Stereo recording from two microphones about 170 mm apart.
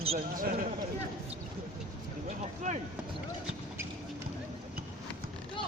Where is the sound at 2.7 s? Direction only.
50° right (ahead or behind).